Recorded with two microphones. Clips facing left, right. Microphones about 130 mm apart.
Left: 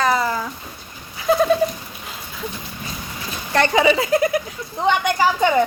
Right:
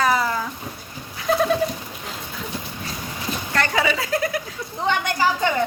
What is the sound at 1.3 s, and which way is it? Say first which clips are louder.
Goat: left 3 dB; centre (ahead or behind).